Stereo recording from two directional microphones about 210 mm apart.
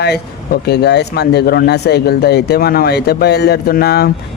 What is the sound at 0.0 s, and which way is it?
A man's voice, 50° left (ahead or behind).